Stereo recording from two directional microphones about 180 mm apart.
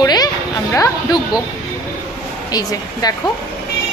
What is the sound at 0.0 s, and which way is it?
Music, 20° left (ahead or behind).